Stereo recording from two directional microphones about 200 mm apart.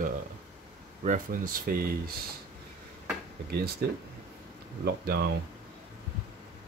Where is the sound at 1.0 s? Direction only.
40° right (ahead or behind).